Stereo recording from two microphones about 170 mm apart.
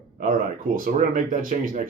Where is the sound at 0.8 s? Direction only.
55° right (ahead or behind).